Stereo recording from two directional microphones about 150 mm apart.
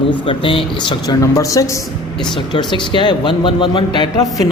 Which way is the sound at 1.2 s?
20° left (ahead or behind).